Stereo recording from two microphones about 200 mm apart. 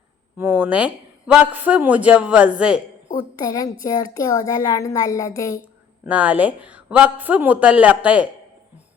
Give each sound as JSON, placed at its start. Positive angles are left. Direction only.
{"t": 0.3, "sound": "speech", "side_deg": -10}
{"t": 3.3, "sound": "a child's voice", "side_deg": 20}
{"t": 6.1, "sound": "speech", "side_deg": -5}